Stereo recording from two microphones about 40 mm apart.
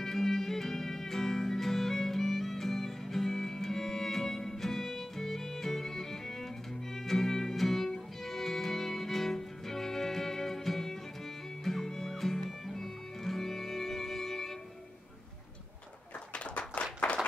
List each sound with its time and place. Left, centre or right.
0.0 s music: centre
16.3 s clapping: left
17.1 s a sound: left